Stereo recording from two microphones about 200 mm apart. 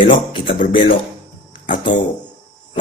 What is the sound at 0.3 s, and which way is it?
Speech, 25° left (ahead or behind).